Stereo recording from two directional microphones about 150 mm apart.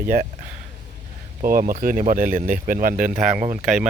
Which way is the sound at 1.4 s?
70° right (ahead or behind).